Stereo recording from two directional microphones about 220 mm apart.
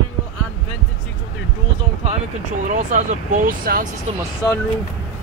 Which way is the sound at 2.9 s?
35° right (ahead or behind).